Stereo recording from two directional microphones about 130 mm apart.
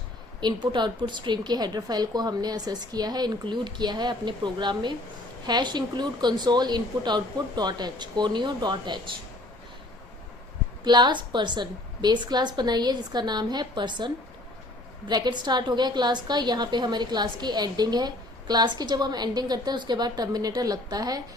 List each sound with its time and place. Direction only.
0.3 s a woman's voice: 35° right (ahead or behind)
10.8 s a woman's voice: 35° right (ahead or behind)